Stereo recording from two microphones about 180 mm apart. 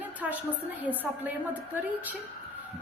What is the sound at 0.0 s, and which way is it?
A woman's voice, 10° right (ahead or behind).